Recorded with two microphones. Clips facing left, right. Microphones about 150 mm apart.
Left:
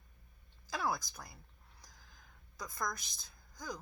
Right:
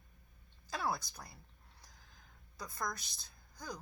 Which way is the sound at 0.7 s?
30° right (ahead or behind).